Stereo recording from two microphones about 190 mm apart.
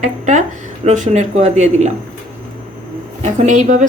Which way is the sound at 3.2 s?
40° right (ahead or behind).